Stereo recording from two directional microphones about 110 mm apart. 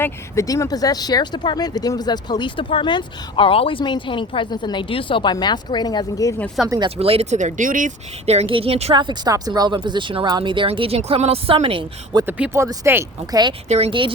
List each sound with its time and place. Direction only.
0.0 s speech: 30° left (ahead or behind)
6.7 s speech: 40° right (ahead or behind)
6.9 s speech: 65° right (ahead or behind); by 7.5 s 90° right
8.3 s a woman's voice: 65° right (ahead or behind)
9.0 s speech: 45° right (ahead or behind)
12.1 s speech: 45° right (ahead or behind)
12.5 s speech: 25° right (ahead or behind)
13.7 s speech: 70° right (ahead or behind)